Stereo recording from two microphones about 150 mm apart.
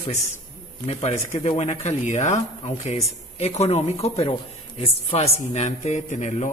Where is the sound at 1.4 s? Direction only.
50° left (ahead or behind).